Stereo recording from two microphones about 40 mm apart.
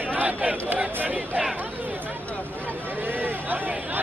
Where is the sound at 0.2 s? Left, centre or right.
Right.